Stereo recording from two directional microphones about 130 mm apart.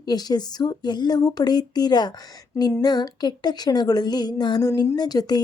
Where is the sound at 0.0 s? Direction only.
30° left (ahead or behind).